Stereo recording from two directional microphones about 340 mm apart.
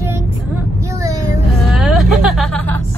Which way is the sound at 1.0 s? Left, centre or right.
Centre.